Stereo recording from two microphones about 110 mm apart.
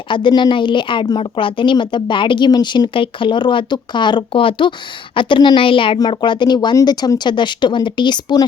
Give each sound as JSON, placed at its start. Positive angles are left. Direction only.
{"t": 0.1, "sound": "a woman's voice", "side_deg": 45}